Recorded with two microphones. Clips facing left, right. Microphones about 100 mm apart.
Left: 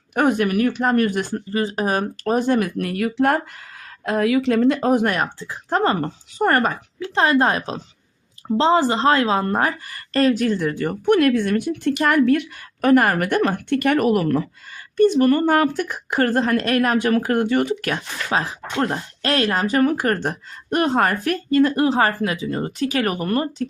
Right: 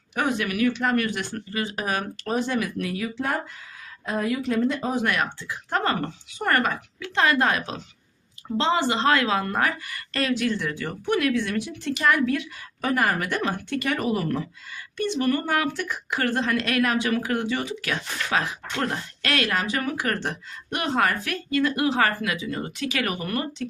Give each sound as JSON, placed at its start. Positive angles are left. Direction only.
{"t": 0.1, "sound": "a woman's voice", "side_deg": 50}
{"t": 4.0, "sound": "a woman's voice", "side_deg": 80}
{"t": 5.0, "sound": "a woman's voice", "side_deg": 40}
{"t": 14.9, "sound": "a woman's voice", "side_deg": 45}
{"t": 17.9, "sound": "speech", "side_deg": 30}